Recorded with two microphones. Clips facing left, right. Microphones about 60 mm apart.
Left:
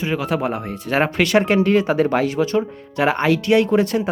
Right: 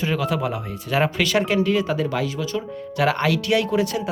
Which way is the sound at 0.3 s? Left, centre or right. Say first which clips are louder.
Left 3 dB; left.